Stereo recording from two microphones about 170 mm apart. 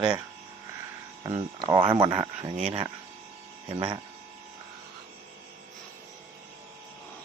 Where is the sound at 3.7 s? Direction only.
25° right (ahead or behind).